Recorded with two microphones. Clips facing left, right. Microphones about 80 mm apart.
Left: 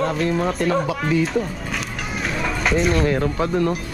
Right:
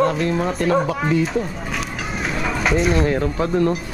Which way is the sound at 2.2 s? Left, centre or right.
Centre.